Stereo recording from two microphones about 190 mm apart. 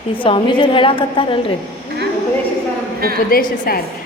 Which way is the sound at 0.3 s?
25° left (ahead or behind).